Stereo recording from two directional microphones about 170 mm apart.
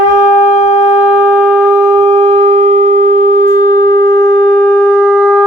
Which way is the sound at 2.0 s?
35° right (ahead or behind).